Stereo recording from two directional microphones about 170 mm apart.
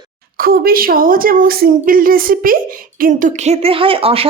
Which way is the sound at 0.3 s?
60° right (ahead or behind).